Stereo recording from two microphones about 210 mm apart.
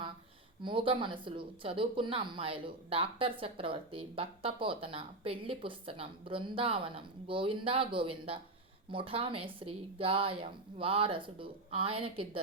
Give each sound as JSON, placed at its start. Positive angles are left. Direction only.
{"t": 0.6, "sound": "speech", "side_deg": -25}